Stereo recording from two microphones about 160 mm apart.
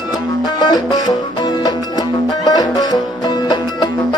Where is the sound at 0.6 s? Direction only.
25° left (ahead or behind).